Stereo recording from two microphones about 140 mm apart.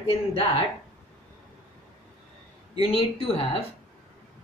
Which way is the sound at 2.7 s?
40° left (ahead or behind).